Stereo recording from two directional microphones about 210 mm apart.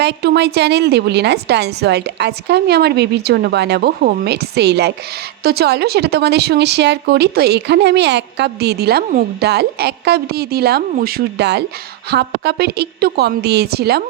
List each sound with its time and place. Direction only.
0.0 s speech: 50° right (ahead or behind)